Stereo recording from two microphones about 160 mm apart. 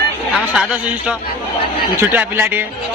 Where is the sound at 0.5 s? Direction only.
10° right (ahead or behind).